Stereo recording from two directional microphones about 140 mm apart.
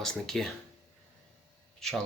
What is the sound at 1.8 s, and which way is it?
Speech, 5° left (ahead or behind).